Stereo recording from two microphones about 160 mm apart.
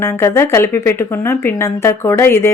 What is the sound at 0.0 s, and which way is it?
A woman's voice, 15° left (ahead or behind).